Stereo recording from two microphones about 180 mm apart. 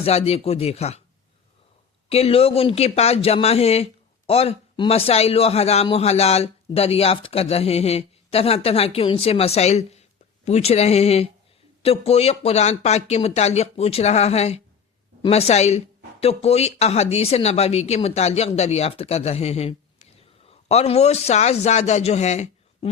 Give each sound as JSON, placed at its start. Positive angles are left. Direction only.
{"t": 0.0, "sound": "speech", "side_deg": 35}
{"t": 2.0, "sound": "speech", "side_deg": 35}